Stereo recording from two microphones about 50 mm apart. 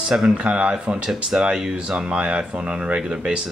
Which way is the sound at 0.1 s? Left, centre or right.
Centre.